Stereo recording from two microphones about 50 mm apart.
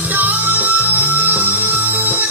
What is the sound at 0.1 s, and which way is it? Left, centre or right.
Music, right.